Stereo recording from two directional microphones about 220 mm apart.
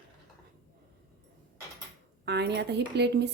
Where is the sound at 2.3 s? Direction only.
50° right (ahead or behind).